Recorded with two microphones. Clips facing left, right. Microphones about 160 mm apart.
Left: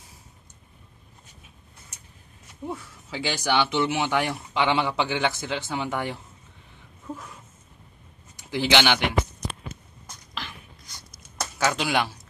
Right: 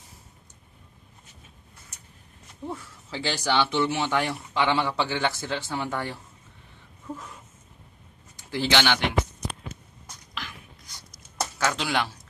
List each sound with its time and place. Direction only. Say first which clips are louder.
2.6 s speech: left 1 dB; 10° left (ahead or behind)
8.4 s a man's voice: left 2 dB; 15° left (ahead or behind)
10.3 s a sound: left 1 dB; 30° left (ahead or behind)
11.5 s speech: left 3 dB; 15° left (ahead or behind)